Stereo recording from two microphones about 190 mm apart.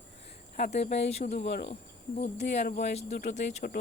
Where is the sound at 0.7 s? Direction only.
35° left (ahead or behind).